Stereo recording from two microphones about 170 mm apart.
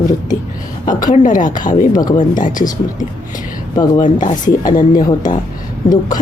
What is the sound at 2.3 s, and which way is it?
Speech, 50° left (ahead or behind).